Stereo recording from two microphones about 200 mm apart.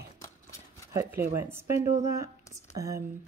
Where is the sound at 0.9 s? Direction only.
15° right (ahead or behind).